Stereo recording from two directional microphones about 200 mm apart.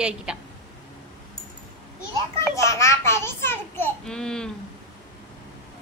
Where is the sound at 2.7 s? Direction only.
15° left (ahead or behind).